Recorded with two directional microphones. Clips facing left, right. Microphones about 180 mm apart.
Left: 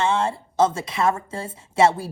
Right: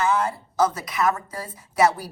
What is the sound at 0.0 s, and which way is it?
A woman's voice, 25° left (ahead or behind).